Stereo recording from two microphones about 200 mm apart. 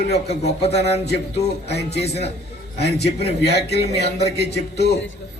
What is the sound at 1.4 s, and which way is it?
A man's voice, 55° left (ahead or behind).